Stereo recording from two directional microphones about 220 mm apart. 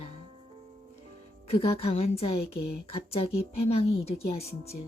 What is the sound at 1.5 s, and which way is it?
Speech, 25° left (ahead or behind).